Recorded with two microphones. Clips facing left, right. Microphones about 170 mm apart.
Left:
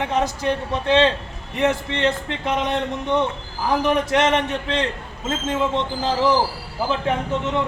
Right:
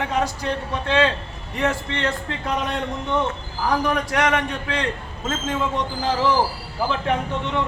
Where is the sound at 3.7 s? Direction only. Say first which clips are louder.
Left 3 dB; 25° left (ahead or behind).